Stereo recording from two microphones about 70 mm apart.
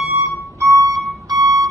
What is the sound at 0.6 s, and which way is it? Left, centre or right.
Music, right.